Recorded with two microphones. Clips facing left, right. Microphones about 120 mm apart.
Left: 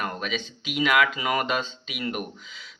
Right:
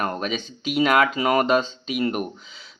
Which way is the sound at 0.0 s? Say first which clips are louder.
Right 4 dB; 40° right (ahead or behind).